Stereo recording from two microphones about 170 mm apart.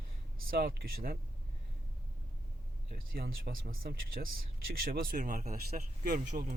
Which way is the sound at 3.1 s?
60° right (ahead or behind).